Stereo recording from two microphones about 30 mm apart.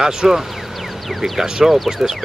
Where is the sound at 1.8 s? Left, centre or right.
Centre.